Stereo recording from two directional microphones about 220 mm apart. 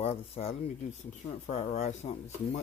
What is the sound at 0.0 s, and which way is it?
Speech, 25° left (ahead or behind).